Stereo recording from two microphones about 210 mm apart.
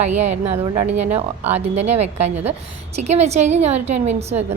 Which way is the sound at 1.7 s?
30° right (ahead or behind).